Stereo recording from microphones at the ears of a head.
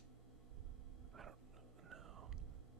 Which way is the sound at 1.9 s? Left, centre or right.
Right.